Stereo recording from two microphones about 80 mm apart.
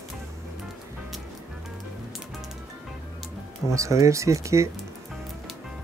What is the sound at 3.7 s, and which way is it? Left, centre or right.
Speech, right.